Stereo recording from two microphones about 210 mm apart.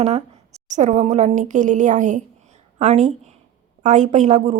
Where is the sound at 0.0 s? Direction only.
30° right (ahead or behind).